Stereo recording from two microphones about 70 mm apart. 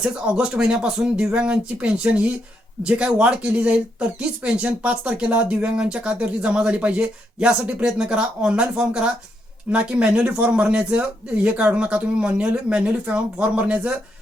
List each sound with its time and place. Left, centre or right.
0.0 s speech: centre